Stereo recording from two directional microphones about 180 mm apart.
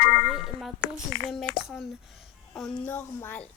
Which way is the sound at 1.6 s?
Centre (ahead or behind).